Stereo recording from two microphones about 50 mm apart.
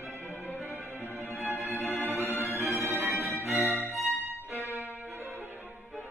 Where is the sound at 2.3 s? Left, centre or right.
Left.